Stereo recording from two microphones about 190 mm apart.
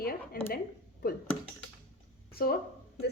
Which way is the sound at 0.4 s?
50° left (ahead or behind).